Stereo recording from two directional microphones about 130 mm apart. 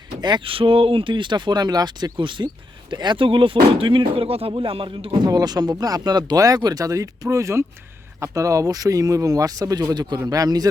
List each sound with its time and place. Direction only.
0.2 s speech: 35° right (ahead or behind)